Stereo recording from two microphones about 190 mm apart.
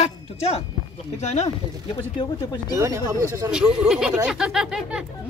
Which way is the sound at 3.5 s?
5° right (ahead or behind).